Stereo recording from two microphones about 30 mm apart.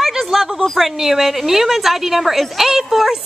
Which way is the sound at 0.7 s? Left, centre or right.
Centre.